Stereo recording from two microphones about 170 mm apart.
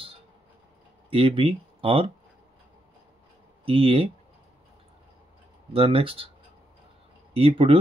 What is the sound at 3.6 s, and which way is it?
Speech, 35° right (ahead or behind).